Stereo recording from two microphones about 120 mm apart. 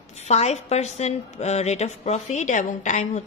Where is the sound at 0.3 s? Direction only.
65° left (ahead or behind).